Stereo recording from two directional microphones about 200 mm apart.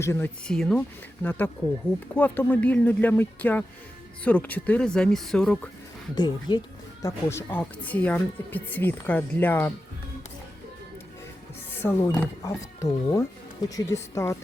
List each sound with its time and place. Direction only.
0.0 s speech: 10° left (ahead or behind)
6.1 s speech: 20° left (ahead or behind)
11.8 s speech: 10° left (ahead or behind)